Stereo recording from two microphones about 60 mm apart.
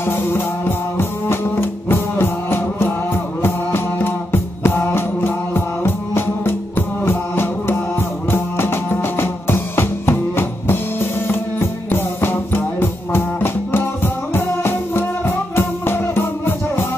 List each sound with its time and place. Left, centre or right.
0.0 s music: left